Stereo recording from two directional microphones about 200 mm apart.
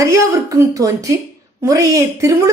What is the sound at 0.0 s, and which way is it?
A woman's voice, 15° right (ahead or behind).